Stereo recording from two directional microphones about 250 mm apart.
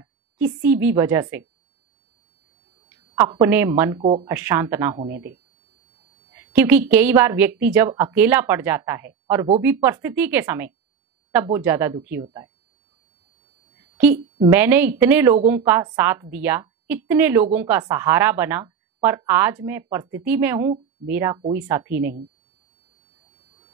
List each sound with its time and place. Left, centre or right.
0.0 s a woman's voice: centre
2.9 s a woman's voice: centre
4.0 s speech: right
4.3 s speech: centre
6.3 s speech: centre
14.4 s speech: centre